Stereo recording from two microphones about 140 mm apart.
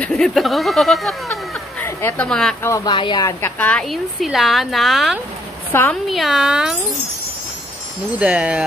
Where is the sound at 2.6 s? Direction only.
20° left (ahead or behind).